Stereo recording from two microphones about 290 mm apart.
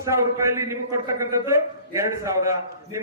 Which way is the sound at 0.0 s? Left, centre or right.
Centre.